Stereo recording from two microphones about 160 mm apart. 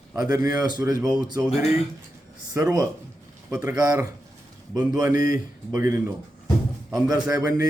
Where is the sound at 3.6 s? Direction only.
20° right (ahead or behind).